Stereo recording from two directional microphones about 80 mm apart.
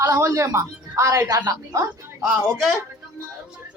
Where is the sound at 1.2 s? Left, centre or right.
Right.